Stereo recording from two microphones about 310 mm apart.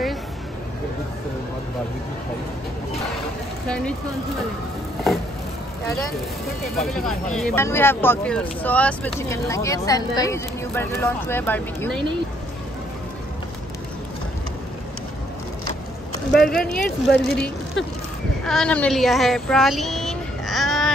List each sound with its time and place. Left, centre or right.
3.6 s speech: centre
6.8 s speech: centre
16.3 s speech: centre
17.8 s speech: left
18.4 s speech: centre